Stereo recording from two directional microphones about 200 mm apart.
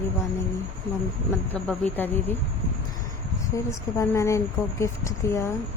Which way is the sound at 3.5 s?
15° left (ahead or behind).